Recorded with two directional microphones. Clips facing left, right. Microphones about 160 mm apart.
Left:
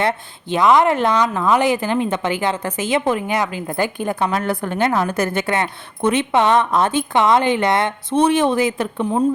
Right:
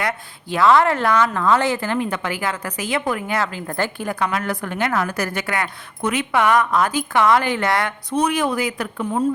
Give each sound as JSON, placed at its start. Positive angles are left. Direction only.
{"t": 0.0, "sound": "a woman's voice", "side_deg": 25}